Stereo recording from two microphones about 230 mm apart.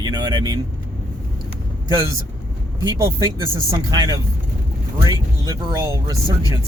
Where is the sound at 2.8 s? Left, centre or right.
Centre.